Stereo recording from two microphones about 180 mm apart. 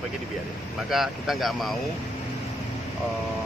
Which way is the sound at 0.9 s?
Centre (ahead or behind).